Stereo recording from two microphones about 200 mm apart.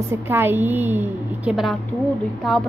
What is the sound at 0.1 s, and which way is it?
A woman's voice, 10° right (ahead or behind).